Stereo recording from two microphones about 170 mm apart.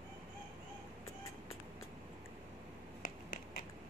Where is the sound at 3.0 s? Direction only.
60° left (ahead or behind).